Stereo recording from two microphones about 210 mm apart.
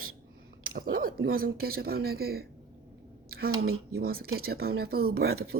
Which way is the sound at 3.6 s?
45° right (ahead or behind).